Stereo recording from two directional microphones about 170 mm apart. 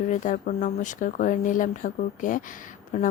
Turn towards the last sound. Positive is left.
turn(degrees=50)  # may be behind; listen again after turning